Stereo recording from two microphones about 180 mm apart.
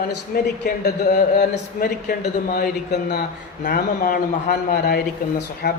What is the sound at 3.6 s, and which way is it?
A man's voice, 50° left (ahead or behind).